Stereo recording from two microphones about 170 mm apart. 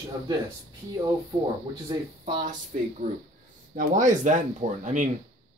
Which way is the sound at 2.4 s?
45° right (ahead or behind).